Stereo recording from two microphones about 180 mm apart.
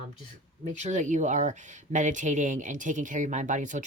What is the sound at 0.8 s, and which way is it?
Speech, 40° right (ahead or behind).